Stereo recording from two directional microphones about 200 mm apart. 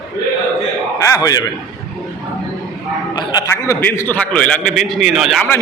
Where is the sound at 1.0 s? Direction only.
15° left (ahead or behind).